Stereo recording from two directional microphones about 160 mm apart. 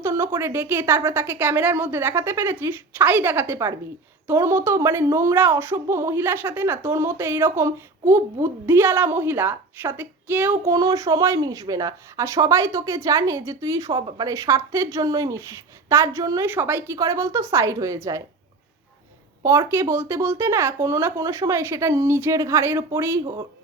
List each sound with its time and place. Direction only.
0.0 s a woman's voice: 15° right (ahead or behind)
19.4 s a woman's voice: 20° right (ahead or behind)